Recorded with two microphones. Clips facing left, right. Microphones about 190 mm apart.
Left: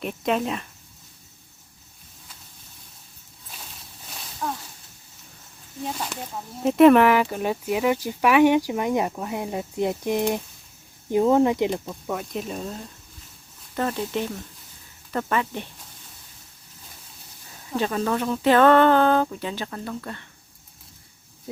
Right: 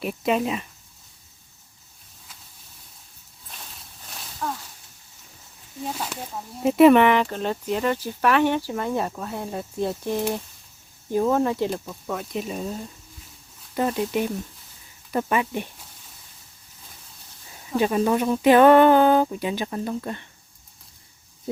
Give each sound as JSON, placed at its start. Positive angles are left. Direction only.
{"t": 0.0, "sound": "speech", "side_deg": -5}
{"t": 3.5, "sound": "a sound", "side_deg": 0}
{"t": 5.8, "sound": "speech", "side_deg": -5}
{"t": 12.2, "sound": "speech", "side_deg": 0}
{"t": 17.7, "sound": "speech", "side_deg": -10}